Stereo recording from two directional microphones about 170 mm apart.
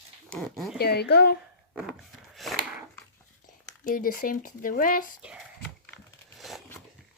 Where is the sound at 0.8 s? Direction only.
70° left (ahead or behind).